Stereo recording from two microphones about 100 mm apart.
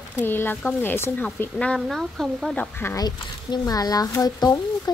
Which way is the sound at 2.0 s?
Centre (ahead or behind).